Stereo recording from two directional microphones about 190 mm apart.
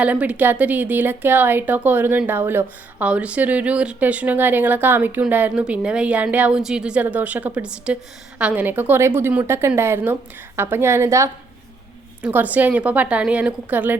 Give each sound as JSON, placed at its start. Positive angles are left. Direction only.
{"t": 0.0, "sound": "a woman's voice", "side_deg": -5}